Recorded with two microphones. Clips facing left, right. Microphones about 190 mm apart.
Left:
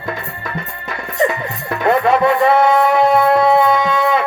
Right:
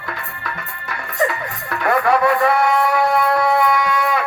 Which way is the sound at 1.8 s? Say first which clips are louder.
Left 3 dB; 25° left (ahead or behind).